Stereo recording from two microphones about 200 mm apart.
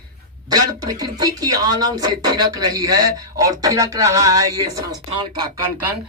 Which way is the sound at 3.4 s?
15° right (ahead or behind).